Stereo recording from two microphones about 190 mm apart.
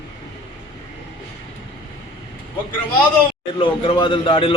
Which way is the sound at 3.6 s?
25° left (ahead or behind).